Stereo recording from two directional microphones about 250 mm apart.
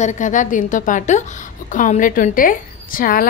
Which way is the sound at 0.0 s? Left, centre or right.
Left.